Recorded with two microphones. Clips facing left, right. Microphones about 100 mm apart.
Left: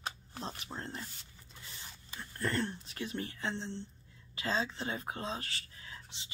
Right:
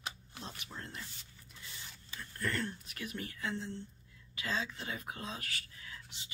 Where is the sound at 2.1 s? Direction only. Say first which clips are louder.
Left 3 dB; 25° left (ahead or behind).